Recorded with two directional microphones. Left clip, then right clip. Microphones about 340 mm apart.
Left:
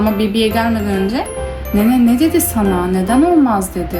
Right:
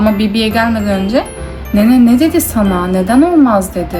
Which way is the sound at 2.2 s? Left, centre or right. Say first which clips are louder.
Right 2 dB; right.